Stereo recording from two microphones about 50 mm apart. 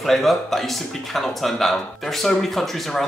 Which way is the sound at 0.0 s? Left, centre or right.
Centre.